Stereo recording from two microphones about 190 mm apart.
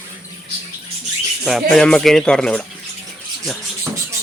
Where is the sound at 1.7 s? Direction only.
5° left (ahead or behind).